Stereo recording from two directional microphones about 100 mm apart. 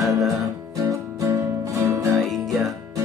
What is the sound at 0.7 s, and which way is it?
Music, 35° right (ahead or behind).